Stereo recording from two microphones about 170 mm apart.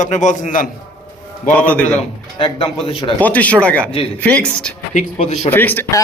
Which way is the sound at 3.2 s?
10° left (ahead or behind).